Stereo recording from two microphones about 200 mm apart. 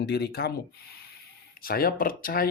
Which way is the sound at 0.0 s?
55° left (ahead or behind).